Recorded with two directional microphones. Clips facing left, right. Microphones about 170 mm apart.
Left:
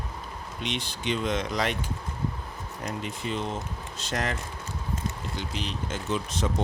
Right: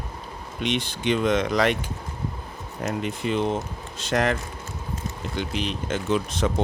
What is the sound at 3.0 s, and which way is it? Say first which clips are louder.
Speech: right 8 dB; 65° right (ahead or behind).